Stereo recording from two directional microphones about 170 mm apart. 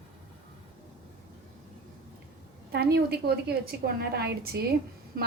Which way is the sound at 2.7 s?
70° right (ahead or behind).